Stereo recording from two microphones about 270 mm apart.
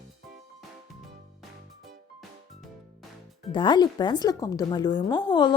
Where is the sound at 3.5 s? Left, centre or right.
Centre.